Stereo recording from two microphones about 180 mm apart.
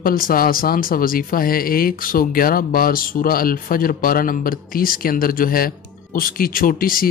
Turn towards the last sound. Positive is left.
turn(degrees=50)  # may be behind; listen again after turning